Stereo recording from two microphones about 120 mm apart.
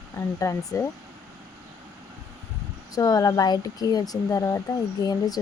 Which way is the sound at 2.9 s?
30° left (ahead or behind).